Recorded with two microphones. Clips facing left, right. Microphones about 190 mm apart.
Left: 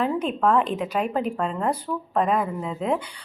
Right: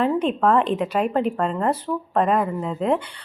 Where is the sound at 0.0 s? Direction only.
Centre (ahead or behind).